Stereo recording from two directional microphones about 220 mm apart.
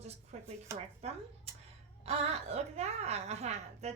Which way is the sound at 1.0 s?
30° right (ahead or behind).